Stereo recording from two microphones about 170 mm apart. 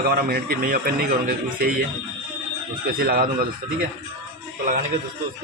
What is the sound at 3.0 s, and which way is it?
Speech, 60° right (ahead or behind).